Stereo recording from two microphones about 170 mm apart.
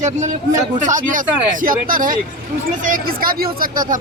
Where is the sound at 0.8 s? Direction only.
50° right (ahead or behind).